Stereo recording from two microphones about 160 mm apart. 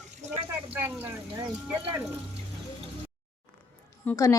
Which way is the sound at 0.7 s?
15° right (ahead or behind).